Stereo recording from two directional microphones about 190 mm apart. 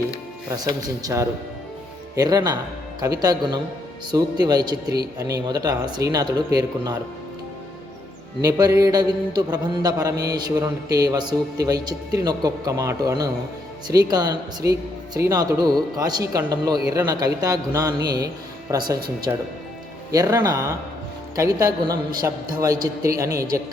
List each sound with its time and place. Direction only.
0.8 s a man's voice: 20° right (ahead or behind)
8.4 s a man's voice: 20° right (ahead or behind)